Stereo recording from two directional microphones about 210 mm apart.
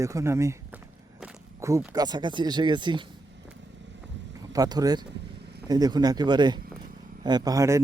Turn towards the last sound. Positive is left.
turn(degrees=-15)  # may be behind; listen again after turning